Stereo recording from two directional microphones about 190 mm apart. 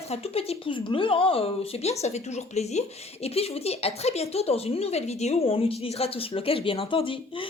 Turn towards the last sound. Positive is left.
turn(degrees=25)  # may be behind; listen again after turning